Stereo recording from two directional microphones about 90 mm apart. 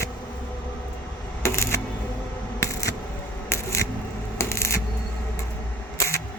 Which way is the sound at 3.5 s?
35° left (ahead or behind).